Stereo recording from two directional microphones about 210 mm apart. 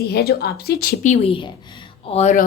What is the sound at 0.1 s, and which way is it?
A woman's voice, 50° left (ahead or behind).